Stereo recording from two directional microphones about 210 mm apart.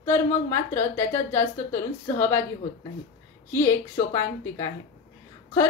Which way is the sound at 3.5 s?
15° left (ahead or behind).